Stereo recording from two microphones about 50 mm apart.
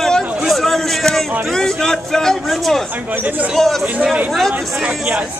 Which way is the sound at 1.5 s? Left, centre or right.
Centre.